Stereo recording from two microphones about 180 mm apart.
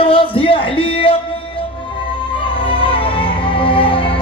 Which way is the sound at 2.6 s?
30° left (ahead or behind).